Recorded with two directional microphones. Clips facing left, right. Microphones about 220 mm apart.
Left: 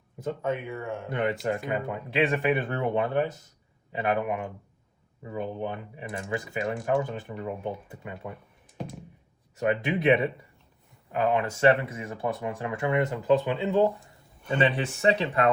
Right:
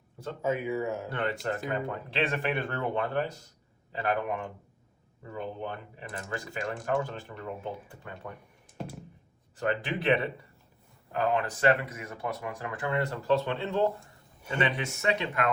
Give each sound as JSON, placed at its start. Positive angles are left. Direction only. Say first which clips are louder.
{"t": 0.4, "sound": "speech", "louder": "right 4 dB", "side_deg": -5}
{"t": 1.1, "sound": "speech", "louder": "left 4 dB", "side_deg": 20}
{"t": 2.2, "sound": "speech", "louder": "left 5 dB", "side_deg": 0}
{"t": 2.6, "sound": "speech", "louder": "left 4 dB", "side_deg": 20}
{"t": 7.3, "sound": "speech", "louder": "left 4 dB", "side_deg": 0}
{"t": 8.8, "sound": "a sound", "louder": "left 2 dB", "side_deg": 0}
{"t": 9.6, "sound": "speech", "louder": "left 4 dB", "side_deg": 15}
{"t": 11.2, "sound": "speech", "louder": "left 4 dB", "side_deg": 25}
{"t": 14.5, "sound": "speech", "louder": "left 5 dB", "side_deg": 30}